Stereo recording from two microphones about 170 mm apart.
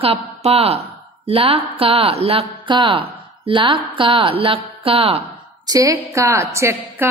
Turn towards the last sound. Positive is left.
turn(degrees=-15)  # may be behind; listen again after turning